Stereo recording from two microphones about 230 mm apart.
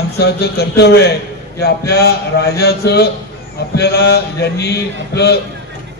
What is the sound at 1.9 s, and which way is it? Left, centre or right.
A man's voice, left.